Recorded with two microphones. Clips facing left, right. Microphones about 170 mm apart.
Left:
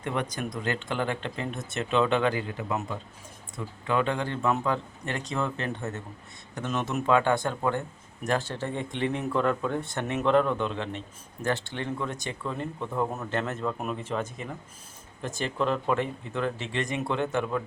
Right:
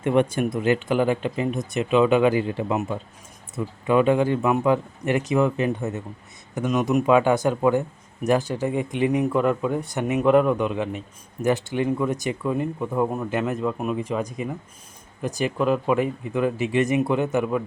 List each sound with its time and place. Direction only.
0.0 s speech: 20° right (ahead or behind)
8.4 s speech: centre (ahead or behind)